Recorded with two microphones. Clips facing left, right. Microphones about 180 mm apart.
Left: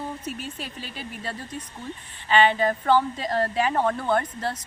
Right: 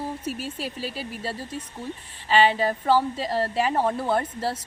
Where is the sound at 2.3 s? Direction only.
5° right (ahead or behind).